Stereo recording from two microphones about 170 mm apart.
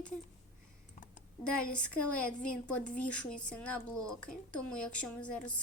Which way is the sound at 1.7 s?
5° left (ahead or behind).